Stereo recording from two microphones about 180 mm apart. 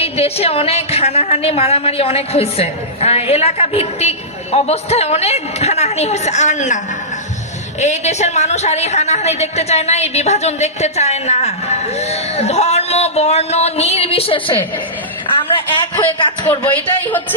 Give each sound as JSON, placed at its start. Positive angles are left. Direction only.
{"t": 0.0, "sound": "a woman's voice", "side_deg": 35}
{"t": 7.8, "sound": "a woman's voice", "side_deg": 40}
{"t": 16.1, "sound": "a man's voice", "side_deg": 25}
{"t": 16.5, "sound": "a man's voice", "side_deg": 10}